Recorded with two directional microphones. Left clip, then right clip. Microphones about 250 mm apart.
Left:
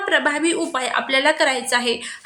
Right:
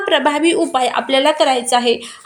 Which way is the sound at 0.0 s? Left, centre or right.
Centre.